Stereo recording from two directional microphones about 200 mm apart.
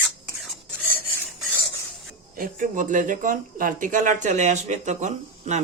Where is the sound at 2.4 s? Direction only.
40° right (ahead or behind).